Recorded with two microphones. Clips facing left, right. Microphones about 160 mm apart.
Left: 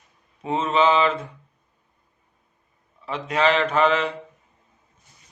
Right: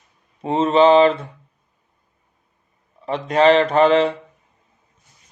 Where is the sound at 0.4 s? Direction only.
35° right (ahead or behind).